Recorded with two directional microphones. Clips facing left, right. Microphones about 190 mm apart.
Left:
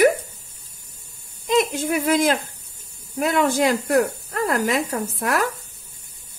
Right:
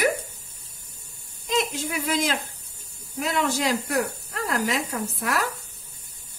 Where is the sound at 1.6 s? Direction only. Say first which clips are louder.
Left 6 dB; 55° left (ahead or behind).